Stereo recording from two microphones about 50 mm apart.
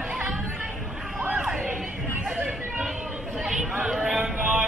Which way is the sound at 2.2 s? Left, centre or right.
Centre.